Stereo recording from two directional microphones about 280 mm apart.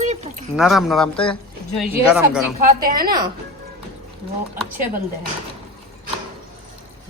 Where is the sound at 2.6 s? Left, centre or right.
Right.